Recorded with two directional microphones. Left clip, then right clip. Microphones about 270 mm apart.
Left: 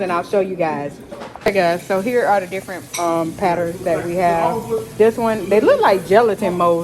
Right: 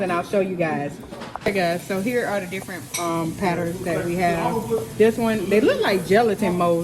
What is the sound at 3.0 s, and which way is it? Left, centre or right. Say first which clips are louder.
Speech: left 6 dB; left.